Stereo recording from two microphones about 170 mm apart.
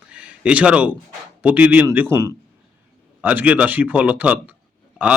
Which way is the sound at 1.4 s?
10° right (ahead or behind).